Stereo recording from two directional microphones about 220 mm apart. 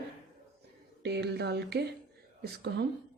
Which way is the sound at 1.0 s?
50° right (ahead or behind).